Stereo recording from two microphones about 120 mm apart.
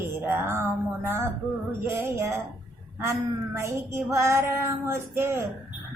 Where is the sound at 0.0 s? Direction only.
20° right (ahead or behind).